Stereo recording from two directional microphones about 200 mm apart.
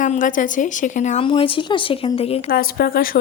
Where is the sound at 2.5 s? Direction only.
50° left (ahead or behind).